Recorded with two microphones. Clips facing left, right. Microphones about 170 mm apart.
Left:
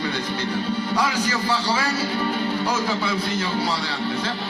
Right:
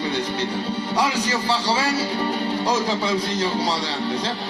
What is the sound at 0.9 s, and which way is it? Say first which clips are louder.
Speech: right 3 dB; 30° right (ahead or behind).